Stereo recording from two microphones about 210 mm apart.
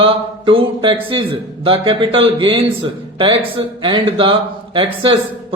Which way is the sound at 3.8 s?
25° right (ahead or behind).